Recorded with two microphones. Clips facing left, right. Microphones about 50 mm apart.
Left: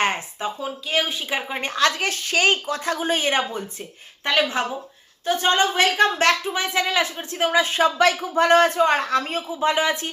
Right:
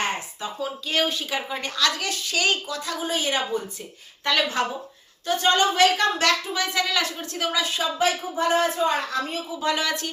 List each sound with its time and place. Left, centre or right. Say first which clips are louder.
0.4 s speech: left 8 dB; left
0.9 s speech: left 1 dB; centre
1.3 s a woman's voice: left 2 dB; left
4.2 s a woman's voice: left 2 dB; left
7.9 s speech: left 5 dB; left
9.6 s speech: left 4 dB; left